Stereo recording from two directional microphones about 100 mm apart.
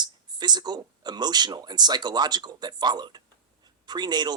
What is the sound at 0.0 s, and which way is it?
Speech, 45° right (ahead or behind).